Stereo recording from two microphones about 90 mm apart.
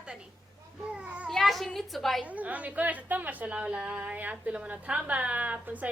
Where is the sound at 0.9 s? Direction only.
15° right (ahead or behind).